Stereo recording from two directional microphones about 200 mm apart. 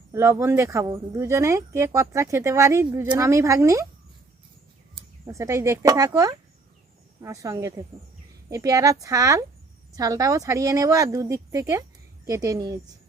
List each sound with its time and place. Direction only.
0.1 s speech: 15° right (ahead or behind)
5.2 s speech: 15° right (ahead or behind)